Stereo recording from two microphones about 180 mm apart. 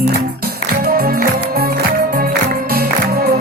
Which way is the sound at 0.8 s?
55° right (ahead or behind).